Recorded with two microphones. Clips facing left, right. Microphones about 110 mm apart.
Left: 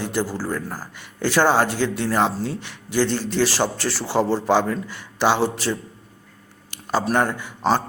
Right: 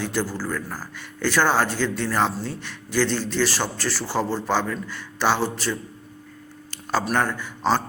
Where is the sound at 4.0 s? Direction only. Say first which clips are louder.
Left 5 dB; 25° left (ahead or behind).